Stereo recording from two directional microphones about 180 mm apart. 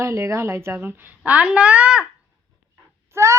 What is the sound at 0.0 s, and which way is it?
Speech, 15° right (ahead or behind).